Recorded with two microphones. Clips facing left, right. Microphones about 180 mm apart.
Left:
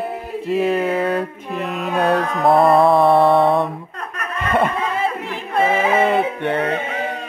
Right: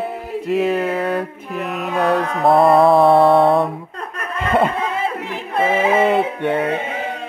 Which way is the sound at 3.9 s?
25° right (ahead or behind).